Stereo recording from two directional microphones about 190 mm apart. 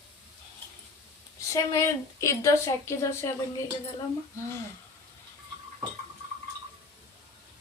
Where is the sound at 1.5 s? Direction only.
15° left (ahead or behind).